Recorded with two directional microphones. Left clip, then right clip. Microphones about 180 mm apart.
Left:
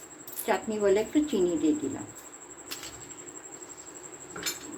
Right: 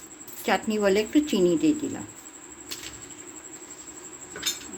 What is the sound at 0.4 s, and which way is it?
Speech, 55° right (ahead or behind).